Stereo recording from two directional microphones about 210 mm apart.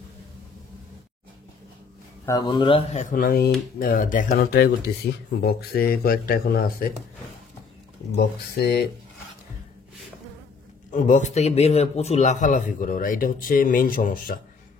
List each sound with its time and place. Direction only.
2.2 s a man's voice: 20° left (ahead or behind); by 6.9 s 45° left (ahead or behind)
8.2 s speech: 50° left (ahead or behind)
10.9 s a man's voice: 35° left (ahead or behind)